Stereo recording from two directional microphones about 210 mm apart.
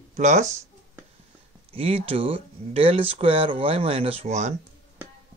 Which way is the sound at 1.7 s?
25° right (ahead or behind).